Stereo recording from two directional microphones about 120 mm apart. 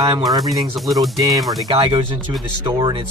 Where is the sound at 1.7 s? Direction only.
50° right (ahead or behind).